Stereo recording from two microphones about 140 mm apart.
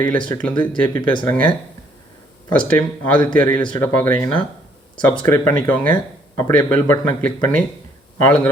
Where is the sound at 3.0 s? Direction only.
10° left (ahead or behind).